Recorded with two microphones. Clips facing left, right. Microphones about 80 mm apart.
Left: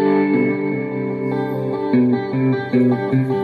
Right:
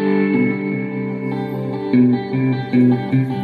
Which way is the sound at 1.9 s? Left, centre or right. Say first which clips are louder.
Right 3 dB; left.